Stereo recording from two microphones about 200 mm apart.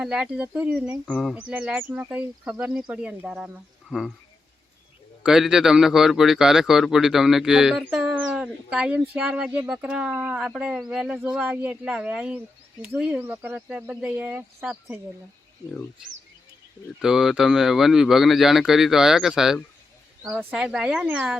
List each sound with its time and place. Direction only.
0.0 s a man's voice: 5° right (ahead or behind)
5.2 s a man's voice: 5° right (ahead or behind)
17.0 s a man's voice: centre (ahead or behind)